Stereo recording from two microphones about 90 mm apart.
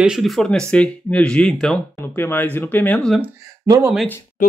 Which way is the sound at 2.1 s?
20° left (ahead or behind).